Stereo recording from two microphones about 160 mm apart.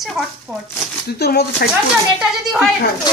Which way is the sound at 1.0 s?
90° left.